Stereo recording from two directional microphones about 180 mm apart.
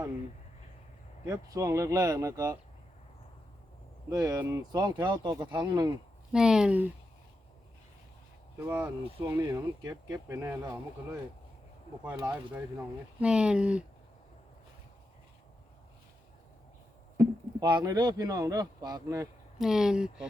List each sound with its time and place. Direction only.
1.3 s speech: 20° right (ahead or behind)
4.1 s speech: 20° right (ahead or behind)
6.3 s speech: 5° right (ahead or behind)
8.5 s speech: 10° right (ahead or behind)
12.0 s speech: 15° right (ahead or behind)
17.2 s speech: 25° right (ahead or behind)
19.5 s speech: 5° right (ahead or behind)